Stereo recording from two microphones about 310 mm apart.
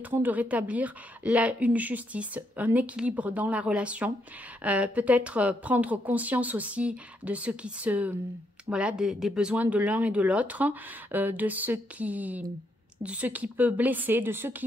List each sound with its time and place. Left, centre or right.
0.0 s a woman's voice: centre